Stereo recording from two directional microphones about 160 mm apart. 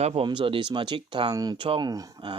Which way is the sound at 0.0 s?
35° right (ahead or behind).